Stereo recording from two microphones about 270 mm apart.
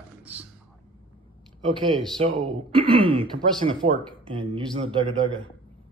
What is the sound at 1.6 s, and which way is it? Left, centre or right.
Speech, centre.